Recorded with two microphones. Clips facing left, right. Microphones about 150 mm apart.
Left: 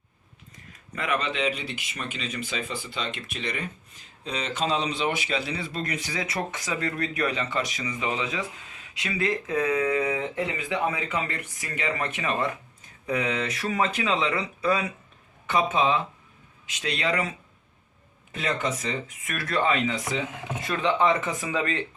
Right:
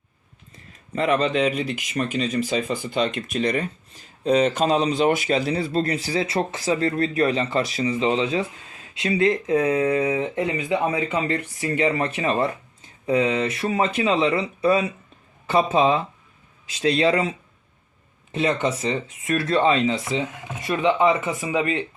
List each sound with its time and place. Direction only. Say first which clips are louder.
0.5 s speech: right 9 dB; 30° right (ahead or behind)
20.6 s speech: right 4 dB; 15° right (ahead or behind)